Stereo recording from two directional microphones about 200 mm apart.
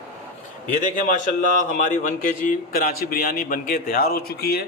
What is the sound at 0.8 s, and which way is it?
A man's voice, 40° left (ahead or behind).